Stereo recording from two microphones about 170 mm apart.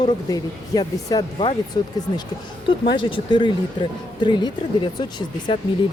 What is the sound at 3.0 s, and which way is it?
Speech, 30° left (ahead or behind).